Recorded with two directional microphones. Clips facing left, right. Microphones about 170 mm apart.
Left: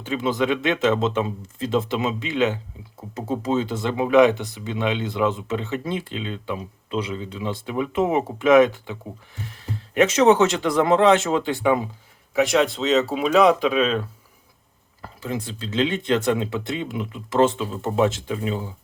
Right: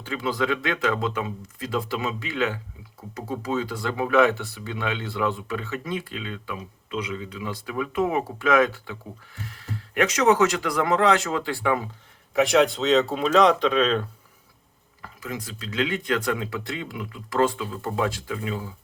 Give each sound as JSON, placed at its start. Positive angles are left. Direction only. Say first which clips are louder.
{"t": 0.0, "sound": "speech", "louder": "left 4 dB", "side_deg": 20}
{"t": 12.3, "sound": "speech", "louder": "even", "side_deg": 0}
{"t": 15.0, "sound": "speech", "louder": "left 5 dB", "side_deg": 30}